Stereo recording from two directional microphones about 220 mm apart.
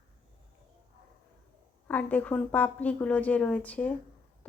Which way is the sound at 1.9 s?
5° left (ahead or behind).